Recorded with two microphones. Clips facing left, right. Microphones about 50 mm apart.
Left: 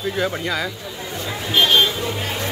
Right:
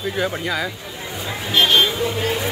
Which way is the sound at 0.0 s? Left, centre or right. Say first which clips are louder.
Even; centre.